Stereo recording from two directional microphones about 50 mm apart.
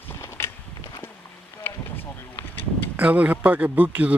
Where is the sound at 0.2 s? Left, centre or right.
Left.